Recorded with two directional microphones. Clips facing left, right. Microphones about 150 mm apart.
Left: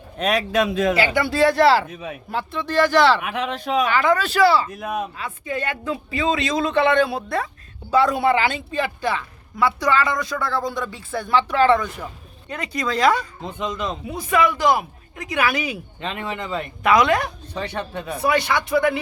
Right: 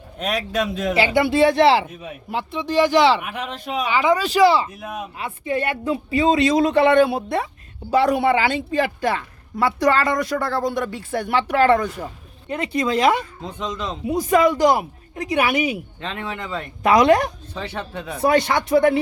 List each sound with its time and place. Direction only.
0.2 s speech: 65° left (ahead or behind)
0.9 s speech: 25° right (ahead or behind)
3.2 s speech: 90° left
3.8 s speech: 15° right (ahead or behind)
4.8 s speech: 70° left (ahead or behind)
5.2 s speech: 25° right (ahead or behind)
9.6 s a woman's voice: 40° right (ahead or behind)
12.5 s speech: 25° right (ahead or behind)
13.5 s speech: centre (ahead or behind)
14.2 s a woman's voice: 40° right (ahead or behind)
16.0 s speech: 10° left (ahead or behind)
16.8 s a woman's voice: 35° right (ahead or behind)
17.5 s speech: 5° right (ahead or behind)
18.2 s speech: 45° right (ahead or behind)